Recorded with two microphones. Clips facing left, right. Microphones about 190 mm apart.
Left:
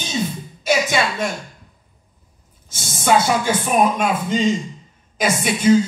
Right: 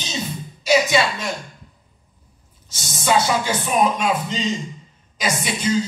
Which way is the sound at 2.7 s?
50° left (ahead or behind).